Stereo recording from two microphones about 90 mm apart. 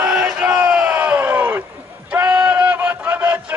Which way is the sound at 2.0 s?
20° right (ahead or behind).